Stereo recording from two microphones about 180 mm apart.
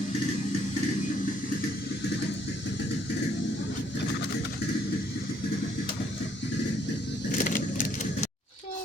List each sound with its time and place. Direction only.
7.3 s vehicle: 45° left (ahead or behind)